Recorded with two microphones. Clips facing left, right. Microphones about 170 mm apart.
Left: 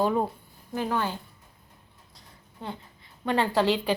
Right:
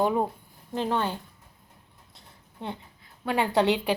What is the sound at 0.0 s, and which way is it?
Speech, 10° right (ahead or behind).